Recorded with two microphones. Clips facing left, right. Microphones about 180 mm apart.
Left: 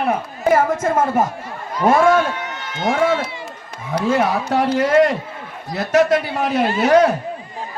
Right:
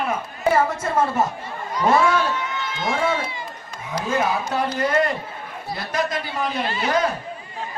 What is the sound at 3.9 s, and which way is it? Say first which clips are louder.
Speech: left 5 dB; 75° left (ahead or behind).